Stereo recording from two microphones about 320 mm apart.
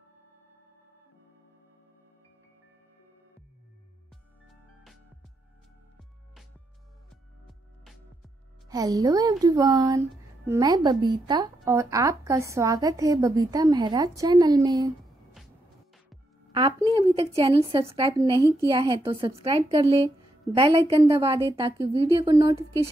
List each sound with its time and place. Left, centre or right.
8.6 s speech: centre
16.9 s speech: centre